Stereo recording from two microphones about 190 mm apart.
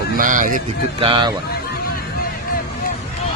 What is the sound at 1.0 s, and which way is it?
Speech, 25° right (ahead or behind).